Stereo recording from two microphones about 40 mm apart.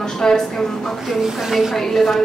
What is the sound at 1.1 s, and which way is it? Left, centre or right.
Speech, centre.